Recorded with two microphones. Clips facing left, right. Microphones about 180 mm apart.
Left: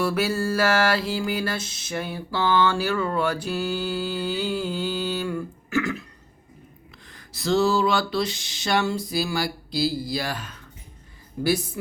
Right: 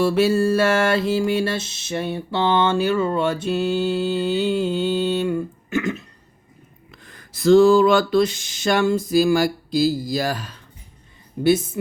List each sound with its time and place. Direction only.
0.0 s music: 25° right (ahead or behind)
7.0 s a sound: 50° right (ahead or behind)
11.4 s music: 20° right (ahead or behind)